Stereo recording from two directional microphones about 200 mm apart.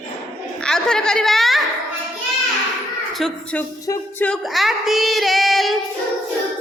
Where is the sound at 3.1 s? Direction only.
5° left (ahead or behind).